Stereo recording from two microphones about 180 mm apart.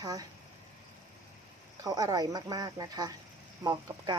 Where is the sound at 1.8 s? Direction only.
20° right (ahead or behind).